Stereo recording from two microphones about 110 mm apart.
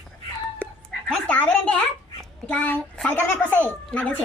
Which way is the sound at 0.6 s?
15° left (ahead or behind).